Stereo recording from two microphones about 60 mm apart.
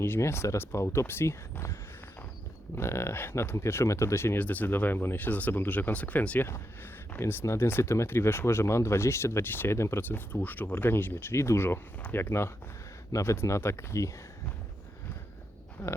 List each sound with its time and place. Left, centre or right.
0.0 s speech: left
4.4 s speech: left
7.2 s speech: left
10.0 s speech: left
12.0 s speech: left
13.2 s speech: left
15.8 s speech: left